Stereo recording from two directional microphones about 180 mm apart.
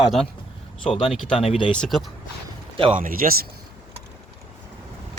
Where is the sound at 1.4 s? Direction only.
35° left (ahead or behind).